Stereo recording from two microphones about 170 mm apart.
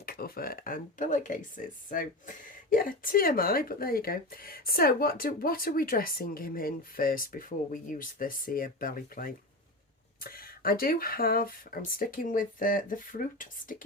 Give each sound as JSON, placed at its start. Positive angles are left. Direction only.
{"t": 0.0, "sound": "speech", "side_deg": 60}